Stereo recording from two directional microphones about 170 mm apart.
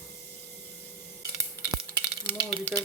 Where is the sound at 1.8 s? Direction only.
20° right (ahead or behind).